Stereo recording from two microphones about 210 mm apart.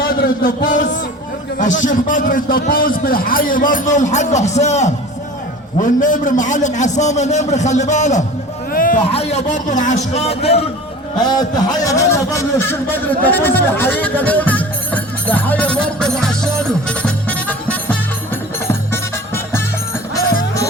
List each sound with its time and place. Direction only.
0.0 s a man's voice: 45° left (ahead or behind)
8.7 s a sound: 40° left (ahead or behind)
9.1 s a man's voice: 30° left (ahead or behind)
11.5 s a man's voice: 15° left (ahead or behind)
18.7 s music: 10° left (ahead or behind)